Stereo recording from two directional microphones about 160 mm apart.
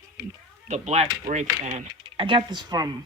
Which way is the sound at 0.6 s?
45° right (ahead or behind).